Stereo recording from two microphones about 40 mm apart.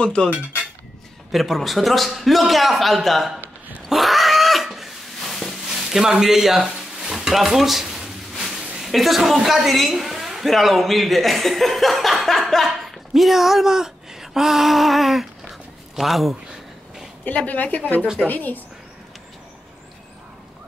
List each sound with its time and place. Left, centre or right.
0.0 s cutlery: centre
1.3 s a woman's voice: centre
3.9 s cat: centre
5.7 s a sound: centre
8.7 s a woman's voice: centre
13.1 s a woman's voice: centre
17.4 s a woman's voice: left